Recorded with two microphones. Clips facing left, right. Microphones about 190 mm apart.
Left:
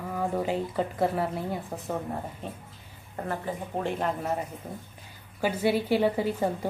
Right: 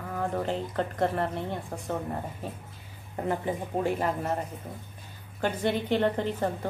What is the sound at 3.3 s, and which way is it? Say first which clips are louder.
Speech: right 3 dB; 15° right (ahead or behind).